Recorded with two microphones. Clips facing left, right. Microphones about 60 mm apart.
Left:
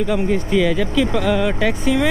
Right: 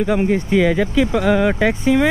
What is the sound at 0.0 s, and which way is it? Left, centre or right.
Speech, centre.